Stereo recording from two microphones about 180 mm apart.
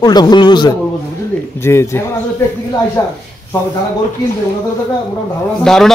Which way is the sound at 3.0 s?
15° left (ahead or behind).